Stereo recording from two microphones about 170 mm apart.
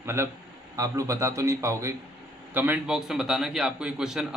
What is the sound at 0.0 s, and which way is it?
A man's voice, 15° right (ahead or behind).